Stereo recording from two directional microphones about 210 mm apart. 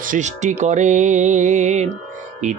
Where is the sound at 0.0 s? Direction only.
35° right (ahead or behind).